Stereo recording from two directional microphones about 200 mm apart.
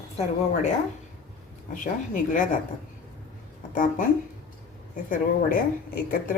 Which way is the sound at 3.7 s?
45° left (ahead or behind).